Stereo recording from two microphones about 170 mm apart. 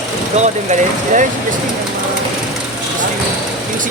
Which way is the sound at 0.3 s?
45° right (ahead or behind).